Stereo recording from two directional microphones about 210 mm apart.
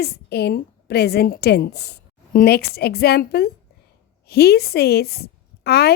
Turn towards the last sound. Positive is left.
turn(degrees=50)  # may be behind; listen again after turning